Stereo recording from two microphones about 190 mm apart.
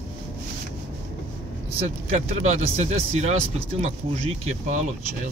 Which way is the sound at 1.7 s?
35° right (ahead or behind).